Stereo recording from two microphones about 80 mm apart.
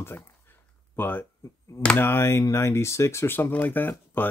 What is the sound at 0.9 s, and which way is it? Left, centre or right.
Speech, left.